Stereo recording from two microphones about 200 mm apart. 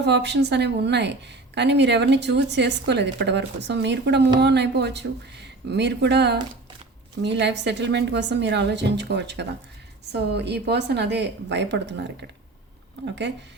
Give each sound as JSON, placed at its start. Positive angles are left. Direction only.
{"t": 0.0, "sound": "a woman's voice", "side_deg": -60}